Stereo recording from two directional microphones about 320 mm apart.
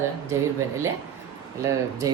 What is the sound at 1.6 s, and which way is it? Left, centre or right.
Speech, centre.